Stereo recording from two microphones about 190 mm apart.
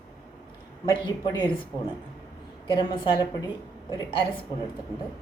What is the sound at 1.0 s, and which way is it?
Speech, 25° left (ahead or behind).